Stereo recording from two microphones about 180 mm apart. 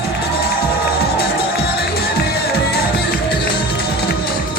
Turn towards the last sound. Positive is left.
turn(degrees=60)  # may be behind; listen again after turning